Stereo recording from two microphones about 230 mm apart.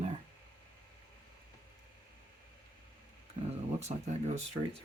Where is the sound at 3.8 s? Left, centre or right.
Right.